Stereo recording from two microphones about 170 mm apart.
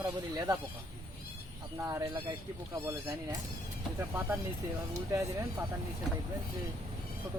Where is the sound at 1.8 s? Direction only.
20° right (ahead or behind).